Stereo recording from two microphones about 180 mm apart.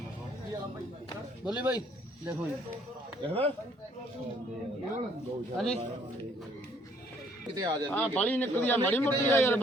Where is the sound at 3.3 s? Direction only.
30° right (ahead or behind).